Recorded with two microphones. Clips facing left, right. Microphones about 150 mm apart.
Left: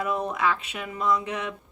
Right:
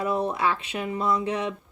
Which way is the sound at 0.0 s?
30° right (ahead or behind).